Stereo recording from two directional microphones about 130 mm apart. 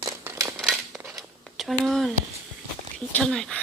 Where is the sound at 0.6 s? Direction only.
Centre (ahead or behind).